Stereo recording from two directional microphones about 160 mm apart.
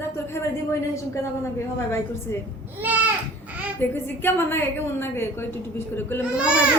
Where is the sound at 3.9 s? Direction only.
15° left (ahead or behind).